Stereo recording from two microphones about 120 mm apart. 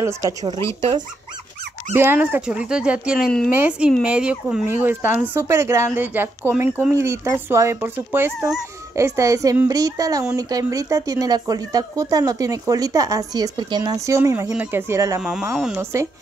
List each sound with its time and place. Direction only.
0.2 s speech: 40° right (ahead or behind)
2.0 s speech: 15° right (ahead or behind)
4.6 s speech: 20° right (ahead or behind)
15.5 s speech: 5° right (ahead or behind)